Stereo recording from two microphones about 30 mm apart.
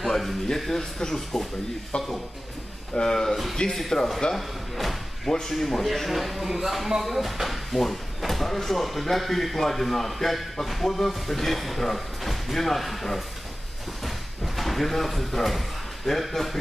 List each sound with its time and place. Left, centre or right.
0.0 s speech: centre
0.7 s speech: centre
2.9 s speech: centre
4.4 s slam: centre
5.5 s speech: centre
14.0 s a sound: centre
16.1 s speech: centre